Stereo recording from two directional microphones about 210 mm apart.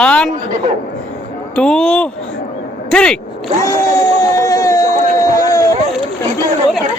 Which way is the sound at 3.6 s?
15° left (ahead or behind).